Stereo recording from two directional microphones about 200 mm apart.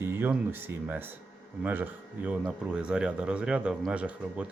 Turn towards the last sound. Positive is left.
turn(degrees=-5)  # may be behind; listen again after turning